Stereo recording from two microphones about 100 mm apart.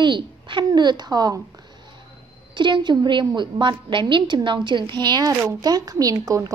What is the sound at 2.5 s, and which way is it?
A woman's voice, 50° right (ahead or behind).